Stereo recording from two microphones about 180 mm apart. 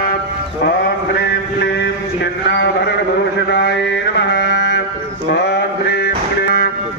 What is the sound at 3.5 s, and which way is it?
Mantra, 75° left (ahead or behind).